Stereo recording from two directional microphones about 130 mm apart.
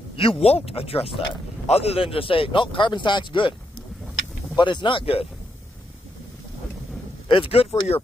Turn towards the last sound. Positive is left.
turn(degrees=50)  # may be behind; listen again after turning